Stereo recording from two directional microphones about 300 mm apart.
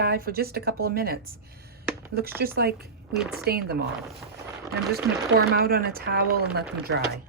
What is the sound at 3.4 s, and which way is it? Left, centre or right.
Speech, right.